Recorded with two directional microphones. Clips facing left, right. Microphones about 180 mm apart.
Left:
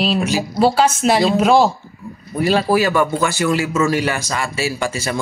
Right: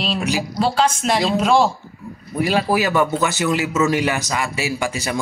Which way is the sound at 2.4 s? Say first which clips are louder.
Left 3 dB; 15° right (ahead or behind).